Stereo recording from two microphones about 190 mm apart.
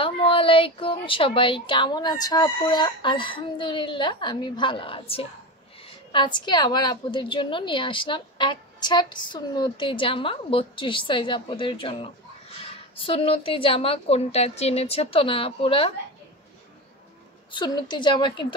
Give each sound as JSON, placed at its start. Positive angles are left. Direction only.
{"t": 0.0, "sound": "a woman's voice", "side_deg": 30}
{"t": 17.5, "sound": "a woman's voice", "side_deg": 25}